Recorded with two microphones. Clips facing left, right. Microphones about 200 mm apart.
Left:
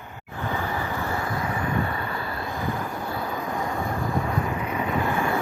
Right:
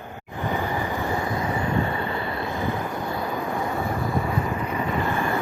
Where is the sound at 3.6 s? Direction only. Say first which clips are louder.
Right 1 dB; 5° right (ahead or behind).